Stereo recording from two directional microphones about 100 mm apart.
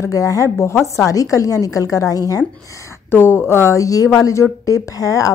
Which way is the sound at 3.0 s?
20° left (ahead or behind).